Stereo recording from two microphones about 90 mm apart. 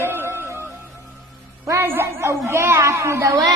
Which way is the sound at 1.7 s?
25° right (ahead or behind).